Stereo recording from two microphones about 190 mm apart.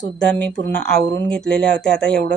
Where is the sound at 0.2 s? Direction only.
5° left (ahead or behind).